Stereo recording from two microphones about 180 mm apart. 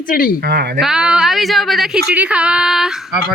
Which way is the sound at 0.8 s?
5° right (ahead or behind).